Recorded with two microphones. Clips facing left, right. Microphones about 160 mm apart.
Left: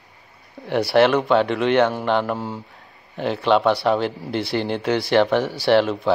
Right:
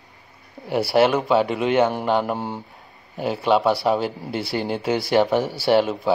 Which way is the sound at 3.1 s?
5° right (ahead or behind).